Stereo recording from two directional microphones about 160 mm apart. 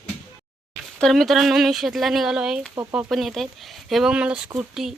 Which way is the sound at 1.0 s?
Centre (ahead or behind).